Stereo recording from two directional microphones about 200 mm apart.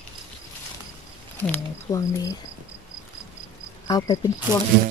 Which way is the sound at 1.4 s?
10° left (ahead or behind).